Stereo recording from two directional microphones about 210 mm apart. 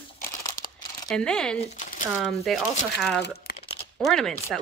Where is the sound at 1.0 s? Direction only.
5° left (ahead or behind).